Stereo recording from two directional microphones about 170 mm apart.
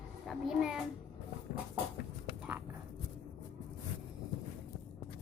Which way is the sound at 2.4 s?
10° right (ahead or behind).